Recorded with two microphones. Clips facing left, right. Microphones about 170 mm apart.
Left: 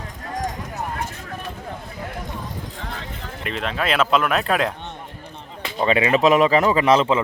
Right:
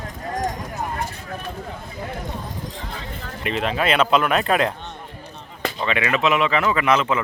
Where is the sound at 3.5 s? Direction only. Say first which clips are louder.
Right 3 dB; 5° right (ahead or behind).